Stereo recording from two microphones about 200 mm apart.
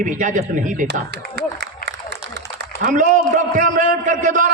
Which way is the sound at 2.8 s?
40° right (ahead or behind).